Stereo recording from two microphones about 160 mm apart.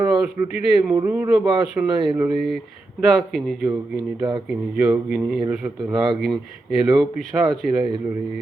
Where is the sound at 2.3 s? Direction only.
Centre (ahead or behind).